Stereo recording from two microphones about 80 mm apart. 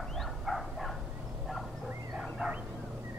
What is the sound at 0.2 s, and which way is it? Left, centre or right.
Dog, centre.